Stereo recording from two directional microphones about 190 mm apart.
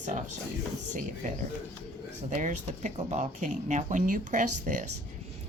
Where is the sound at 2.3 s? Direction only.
40° right (ahead or behind).